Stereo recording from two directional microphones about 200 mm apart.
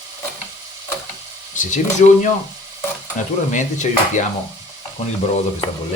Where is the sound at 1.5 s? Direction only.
40° left (ahead or behind).